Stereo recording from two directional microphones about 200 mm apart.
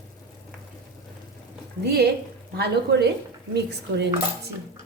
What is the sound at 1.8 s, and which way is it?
A woman's voice, 50° right (ahead or behind).